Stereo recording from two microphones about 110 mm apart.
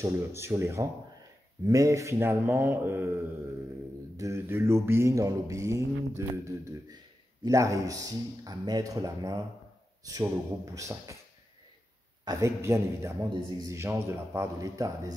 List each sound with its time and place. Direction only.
0.0 s mantra: 25° right (ahead or behind)
7.4 s speech: 30° right (ahead or behind)
10.0 s mantra: 30° right (ahead or behind)
12.3 s mantra: 25° right (ahead or behind)
13.2 s speech: 40° right (ahead or behind)
13.7 s mantra: 25° right (ahead or behind)